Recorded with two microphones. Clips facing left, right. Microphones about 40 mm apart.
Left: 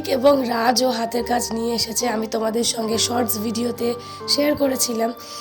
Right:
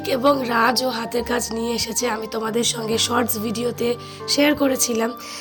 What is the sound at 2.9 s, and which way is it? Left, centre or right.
Speech, right.